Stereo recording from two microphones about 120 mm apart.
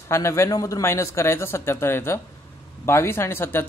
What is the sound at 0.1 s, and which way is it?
Speech, 25° left (ahead or behind).